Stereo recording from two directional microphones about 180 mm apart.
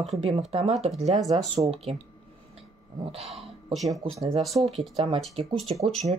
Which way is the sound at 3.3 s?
Centre (ahead or behind).